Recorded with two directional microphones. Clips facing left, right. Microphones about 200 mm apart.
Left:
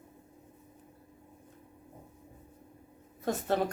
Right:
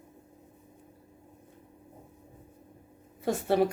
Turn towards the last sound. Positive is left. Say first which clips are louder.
# right 4 dB
turn(degrees=-10)  # may be behind; listen again after turning